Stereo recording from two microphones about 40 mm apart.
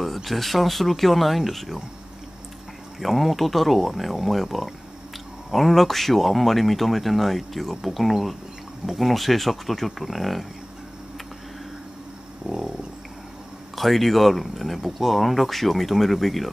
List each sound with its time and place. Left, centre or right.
0.0 s speech: centre
3.0 s speech: centre
12.4 s a sound: right
13.7 s speech: centre